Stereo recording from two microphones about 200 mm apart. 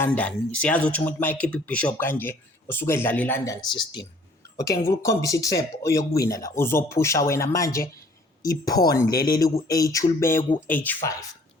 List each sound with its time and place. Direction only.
0.0 s speech: 10° left (ahead or behind)